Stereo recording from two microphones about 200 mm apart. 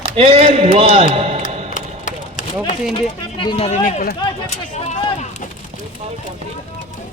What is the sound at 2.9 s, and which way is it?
Speech, 25° left (ahead or behind).